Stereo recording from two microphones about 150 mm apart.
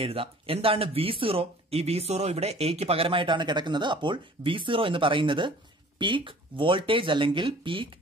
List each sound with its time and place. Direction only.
0.0 s speech: 40° right (ahead or behind)